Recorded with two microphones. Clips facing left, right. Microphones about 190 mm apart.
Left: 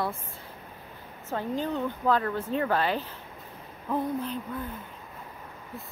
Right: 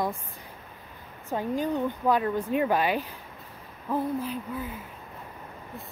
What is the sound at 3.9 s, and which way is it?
Hoot, 5° right (ahead or behind).